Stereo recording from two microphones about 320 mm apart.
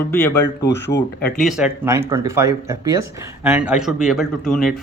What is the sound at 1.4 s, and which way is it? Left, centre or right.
A man's voice, centre.